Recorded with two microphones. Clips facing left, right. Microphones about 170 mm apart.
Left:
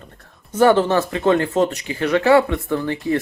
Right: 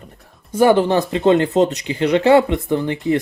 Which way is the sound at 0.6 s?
15° right (ahead or behind).